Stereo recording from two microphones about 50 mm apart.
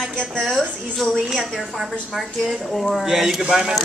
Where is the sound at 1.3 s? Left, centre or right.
Centre.